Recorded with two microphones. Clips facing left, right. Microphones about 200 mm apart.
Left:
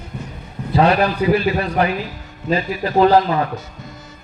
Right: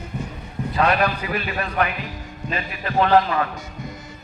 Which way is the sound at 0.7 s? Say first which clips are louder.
Left 5 dB; 30° left (ahead or behind).